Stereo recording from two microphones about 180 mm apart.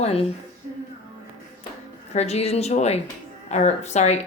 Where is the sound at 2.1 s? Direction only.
35° left (ahead or behind).